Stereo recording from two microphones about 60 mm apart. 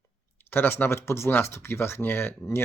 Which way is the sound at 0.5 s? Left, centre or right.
Left.